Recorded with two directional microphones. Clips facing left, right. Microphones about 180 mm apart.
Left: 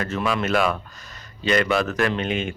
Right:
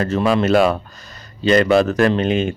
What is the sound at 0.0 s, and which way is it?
Speech, 35° right (ahead or behind).